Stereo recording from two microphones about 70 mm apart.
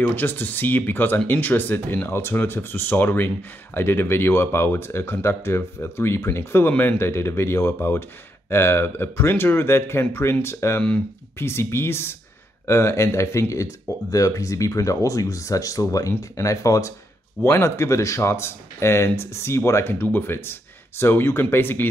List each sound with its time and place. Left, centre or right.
0.0 s speech: left